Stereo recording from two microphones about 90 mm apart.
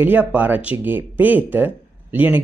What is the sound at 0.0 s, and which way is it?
Speech, 20° right (ahead or behind).